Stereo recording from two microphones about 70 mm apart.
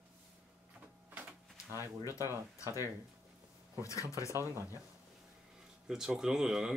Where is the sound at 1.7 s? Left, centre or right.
Right.